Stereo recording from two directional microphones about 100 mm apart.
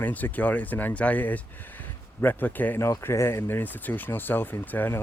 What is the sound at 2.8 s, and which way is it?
Speech, 30° left (ahead or behind).